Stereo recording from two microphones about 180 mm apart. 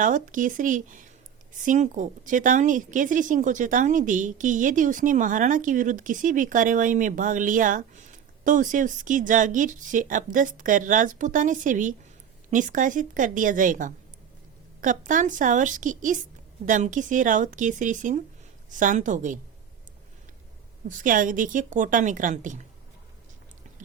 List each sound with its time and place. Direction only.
0.0 s a woman's voice: 45° right (ahead or behind)
20.8 s a woman's voice: 45° right (ahead or behind)